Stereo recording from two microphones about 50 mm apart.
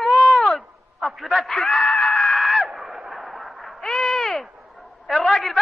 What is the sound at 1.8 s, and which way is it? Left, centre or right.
Screaming, left.